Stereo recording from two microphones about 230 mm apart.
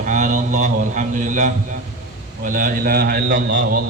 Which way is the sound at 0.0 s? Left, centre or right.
Right.